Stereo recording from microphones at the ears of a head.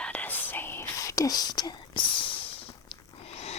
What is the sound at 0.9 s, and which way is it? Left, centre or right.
Whispering, left.